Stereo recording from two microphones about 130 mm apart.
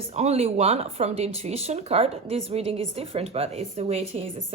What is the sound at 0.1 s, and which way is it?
Speech, 55° right (ahead or behind).